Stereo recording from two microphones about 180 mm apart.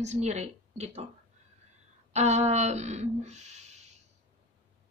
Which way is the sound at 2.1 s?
40° right (ahead or behind).